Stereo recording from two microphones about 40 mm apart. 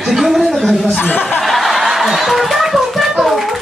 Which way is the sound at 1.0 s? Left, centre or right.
Left.